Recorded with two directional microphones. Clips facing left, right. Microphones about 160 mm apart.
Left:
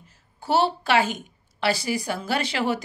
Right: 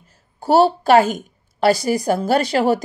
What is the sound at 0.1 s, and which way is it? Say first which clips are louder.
A woman's voice: right 7 dB; 40° right (ahead or behind).